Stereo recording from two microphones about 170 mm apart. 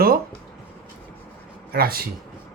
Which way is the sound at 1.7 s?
60° right (ahead or behind).